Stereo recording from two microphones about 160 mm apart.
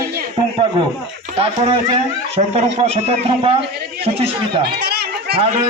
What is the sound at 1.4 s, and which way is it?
A man's voice, 40° right (ahead or behind).